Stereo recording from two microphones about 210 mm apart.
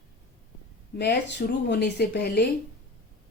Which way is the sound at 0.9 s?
55° left (ahead or behind).